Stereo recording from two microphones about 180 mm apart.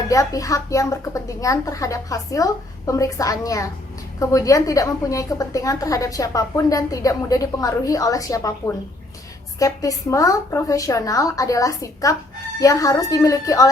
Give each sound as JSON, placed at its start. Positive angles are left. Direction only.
{"t": 0.1, "sound": "a woman's voice", "side_deg": 20}